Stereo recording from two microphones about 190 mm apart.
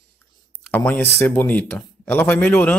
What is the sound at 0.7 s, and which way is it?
Speech, 10° left (ahead or behind).